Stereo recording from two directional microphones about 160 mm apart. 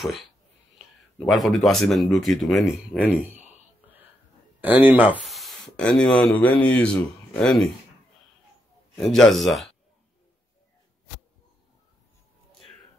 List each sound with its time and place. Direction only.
1.2 s speech: centre (ahead or behind)
3.1 s speech: 10° right (ahead or behind)
4.6 s speech: 10° right (ahead or behind)
8.9 s speech: centre (ahead or behind)